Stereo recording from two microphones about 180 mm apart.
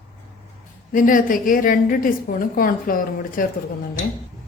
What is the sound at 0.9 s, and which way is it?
A woman's voice, 50° left (ahead or behind).